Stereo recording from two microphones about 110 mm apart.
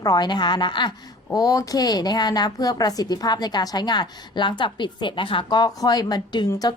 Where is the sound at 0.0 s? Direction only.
40° left (ahead or behind).